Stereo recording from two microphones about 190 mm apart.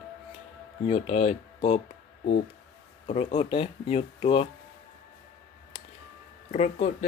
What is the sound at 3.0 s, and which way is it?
Speech, 35° left (ahead or behind).